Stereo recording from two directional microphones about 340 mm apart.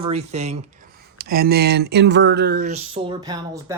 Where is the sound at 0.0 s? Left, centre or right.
Centre.